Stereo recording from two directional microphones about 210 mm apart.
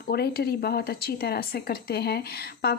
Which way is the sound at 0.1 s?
50° left (ahead or behind).